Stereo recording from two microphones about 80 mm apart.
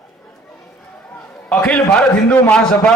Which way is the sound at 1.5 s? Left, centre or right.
Centre.